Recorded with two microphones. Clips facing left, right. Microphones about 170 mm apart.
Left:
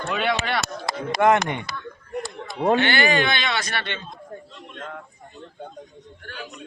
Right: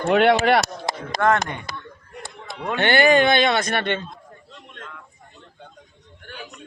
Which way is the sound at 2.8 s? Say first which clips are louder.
Right 5 dB; 50° right (ahead or behind).